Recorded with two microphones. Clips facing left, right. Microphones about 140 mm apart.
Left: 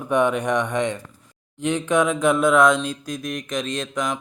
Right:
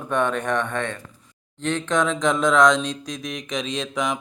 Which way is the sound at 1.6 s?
10° left (ahead or behind).